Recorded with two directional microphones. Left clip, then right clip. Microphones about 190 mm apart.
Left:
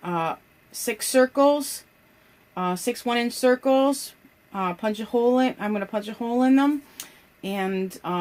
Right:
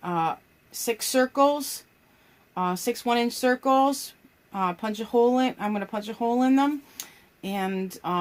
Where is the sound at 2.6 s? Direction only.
30° right (ahead or behind).